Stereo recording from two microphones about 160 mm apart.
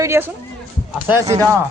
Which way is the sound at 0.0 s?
15° right (ahead or behind).